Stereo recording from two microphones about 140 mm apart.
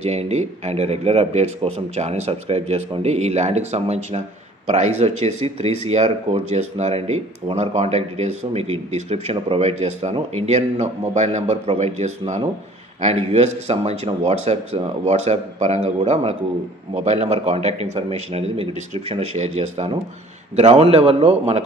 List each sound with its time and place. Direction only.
0.0 s speech: 50° right (ahead or behind)